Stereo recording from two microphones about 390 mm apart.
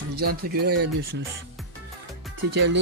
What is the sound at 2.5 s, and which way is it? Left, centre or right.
Speech, right.